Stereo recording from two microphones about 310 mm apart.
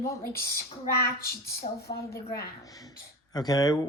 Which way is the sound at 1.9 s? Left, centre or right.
Centre.